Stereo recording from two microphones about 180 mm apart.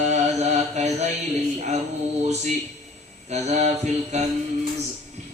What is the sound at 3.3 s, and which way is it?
Mantra, 35° right (ahead or behind).